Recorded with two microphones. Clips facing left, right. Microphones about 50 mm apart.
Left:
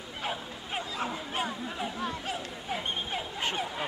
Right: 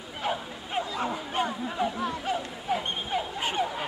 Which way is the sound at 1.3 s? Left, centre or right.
Centre.